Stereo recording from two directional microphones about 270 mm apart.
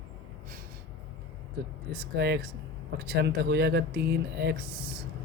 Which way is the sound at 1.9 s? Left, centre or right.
Right.